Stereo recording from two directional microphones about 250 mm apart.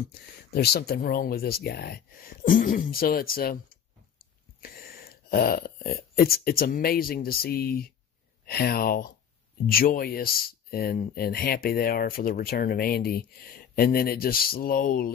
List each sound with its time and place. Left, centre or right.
0.0 s speech: left